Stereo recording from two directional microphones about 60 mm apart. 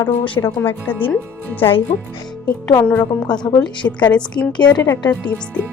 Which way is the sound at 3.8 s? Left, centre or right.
Centre.